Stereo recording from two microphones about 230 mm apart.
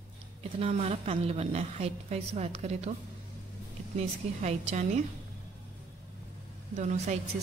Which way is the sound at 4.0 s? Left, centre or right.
Right.